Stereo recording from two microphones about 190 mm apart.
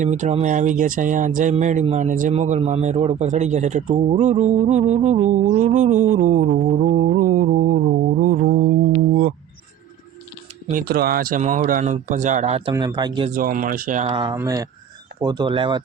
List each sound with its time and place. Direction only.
0.0 s speech: 40° right (ahead or behind)
8.2 s music: 50° right (ahead or behind)
10.7 s speech: 50° right (ahead or behind); by 12.7 s 35° right (ahead or behind)
12.7 s speech: 20° right (ahead or behind)
13.3 s speech: 45° right (ahead or behind)
14.1 s speech: 25° right (ahead or behind)